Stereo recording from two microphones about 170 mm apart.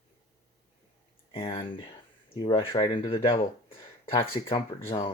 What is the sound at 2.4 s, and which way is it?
Speech, 30° left (ahead or behind).